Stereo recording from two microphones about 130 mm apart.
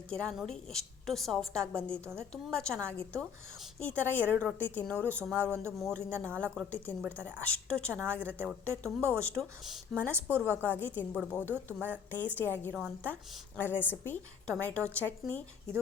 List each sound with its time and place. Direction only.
0.1 s a woman's voice: 5° left (ahead or behind)
5.4 s speech: 20° right (ahead or behind)
5.8 s speech: 10° left (ahead or behind)
10.3 s a woman's voice: 15° right (ahead or behind)
10.8 s speech: 15° left (ahead or behind)
11.5 s a woman's voice: 15° right (ahead or behind)
12.1 s speech: 15° left (ahead or behind)